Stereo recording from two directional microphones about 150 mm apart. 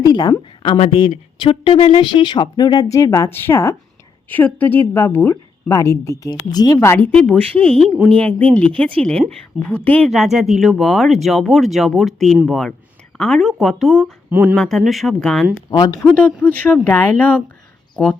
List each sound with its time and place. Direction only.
0.0 s a woman's voice: 25° left (ahead or behind); by 7.8 s 10° left (ahead or behind)
7.9 s speech: 5° right (ahead or behind)
8.2 s a woman's voice: 10° left (ahead or behind)
10.1 s speech: centre (ahead or behind)
14.3 s speech: 15° right (ahead or behind)
14.5 s speech: centre (ahead or behind)
15.7 s speech: 25° left (ahead or behind)
16.4 s a woman's voice: 5° left (ahead or behind)